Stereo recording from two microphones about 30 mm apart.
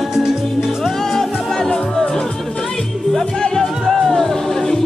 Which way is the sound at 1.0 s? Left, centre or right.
Centre.